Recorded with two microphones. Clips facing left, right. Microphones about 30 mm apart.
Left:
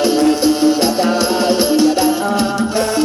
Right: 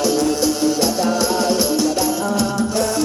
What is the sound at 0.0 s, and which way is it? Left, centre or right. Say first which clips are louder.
Music: left 5 dB; left.